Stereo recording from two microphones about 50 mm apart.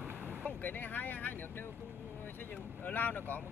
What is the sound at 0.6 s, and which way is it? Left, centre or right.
Speech, left.